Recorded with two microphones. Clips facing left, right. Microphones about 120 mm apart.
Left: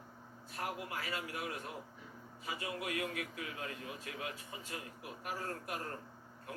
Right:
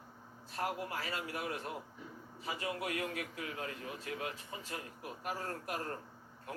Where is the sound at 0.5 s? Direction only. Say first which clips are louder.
Right 3 dB; 35° right (ahead or behind).